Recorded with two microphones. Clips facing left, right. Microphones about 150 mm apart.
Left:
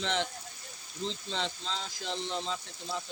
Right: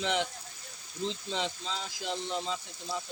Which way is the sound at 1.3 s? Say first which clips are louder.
Right 1 dB; 10° right (ahead or behind).